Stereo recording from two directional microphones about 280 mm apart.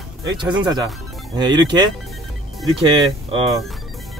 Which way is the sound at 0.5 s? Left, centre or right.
Centre.